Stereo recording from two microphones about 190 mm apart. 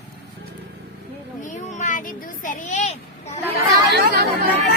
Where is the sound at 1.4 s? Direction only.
40° left (ahead or behind).